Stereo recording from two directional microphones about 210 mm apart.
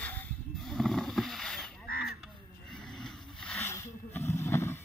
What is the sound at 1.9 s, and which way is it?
Crow, 45° left (ahead or behind).